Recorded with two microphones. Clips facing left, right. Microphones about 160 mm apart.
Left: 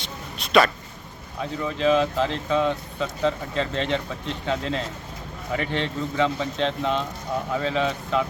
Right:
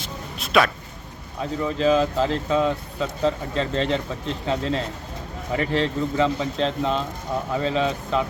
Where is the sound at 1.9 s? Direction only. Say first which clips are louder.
Right 1 dB; centre (ahead or behind).